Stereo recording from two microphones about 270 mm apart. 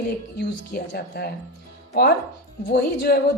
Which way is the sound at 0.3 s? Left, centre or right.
Left.